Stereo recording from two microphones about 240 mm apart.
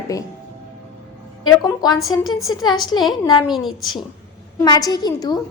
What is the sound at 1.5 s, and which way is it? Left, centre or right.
A woman's voice, centre.